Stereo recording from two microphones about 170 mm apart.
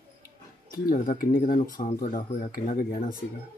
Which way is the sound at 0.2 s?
60° left (ahead or behind).